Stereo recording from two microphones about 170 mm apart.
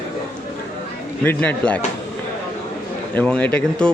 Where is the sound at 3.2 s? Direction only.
5° left (ahead or behind).